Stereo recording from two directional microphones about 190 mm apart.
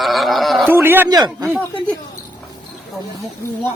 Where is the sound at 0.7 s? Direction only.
10° right (ahead or behind).